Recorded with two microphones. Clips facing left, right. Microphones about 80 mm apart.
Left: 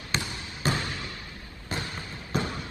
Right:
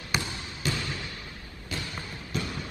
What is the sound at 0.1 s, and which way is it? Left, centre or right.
Basketball bounce, centre.